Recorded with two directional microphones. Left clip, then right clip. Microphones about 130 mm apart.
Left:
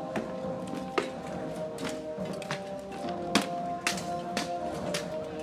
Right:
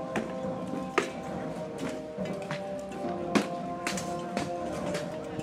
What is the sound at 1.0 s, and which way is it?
Chopping, 5° right (ahead or behind).